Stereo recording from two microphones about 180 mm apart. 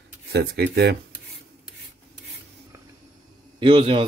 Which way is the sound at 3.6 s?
30° right (ahead or behind).